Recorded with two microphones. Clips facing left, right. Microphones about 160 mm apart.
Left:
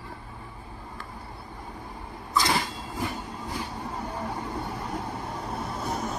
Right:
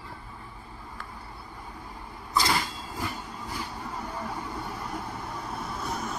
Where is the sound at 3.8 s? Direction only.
25° left (ahead or behind).